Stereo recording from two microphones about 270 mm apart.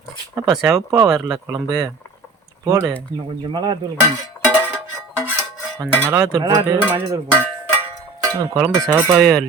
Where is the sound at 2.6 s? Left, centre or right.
Centre.